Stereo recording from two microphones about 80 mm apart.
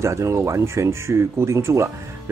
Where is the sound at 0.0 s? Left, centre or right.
Right.